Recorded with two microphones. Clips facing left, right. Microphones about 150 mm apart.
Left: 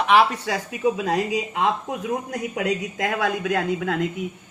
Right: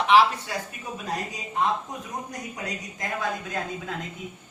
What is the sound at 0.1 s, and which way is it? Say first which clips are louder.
Speech: even; 55° left (ahead or behind).